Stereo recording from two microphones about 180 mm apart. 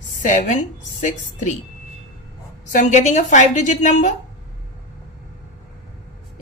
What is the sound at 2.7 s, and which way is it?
A woman's voice, 40° left (ahead or behind).